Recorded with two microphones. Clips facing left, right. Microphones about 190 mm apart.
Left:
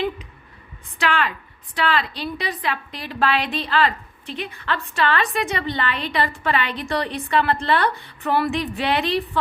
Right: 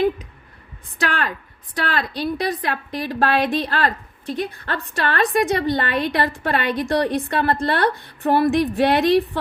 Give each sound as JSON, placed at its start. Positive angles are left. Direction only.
{"t": 0.9, "sound": "a woman's voice", "side_deg": -40}